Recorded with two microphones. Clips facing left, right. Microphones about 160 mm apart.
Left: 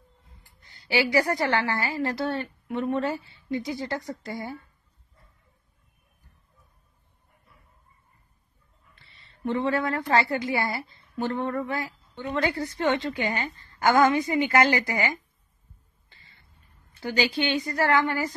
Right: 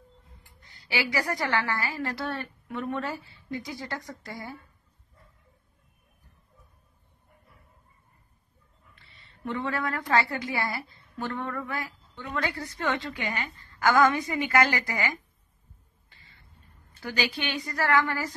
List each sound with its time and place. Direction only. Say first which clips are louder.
0.8 s a woman's voice: left 6 dB; 30° left (ahead or behind)
8.9 s a woman's voice: left 1 dB; 30° left (ahead or behind)
17.0 s a woman's voice: left 5 dB; 25° left (ahead or behind)